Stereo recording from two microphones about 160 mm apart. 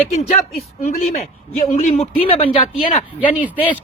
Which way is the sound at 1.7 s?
40° left (ahead or behind).